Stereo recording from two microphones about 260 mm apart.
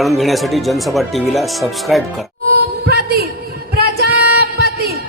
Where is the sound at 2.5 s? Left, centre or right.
Right.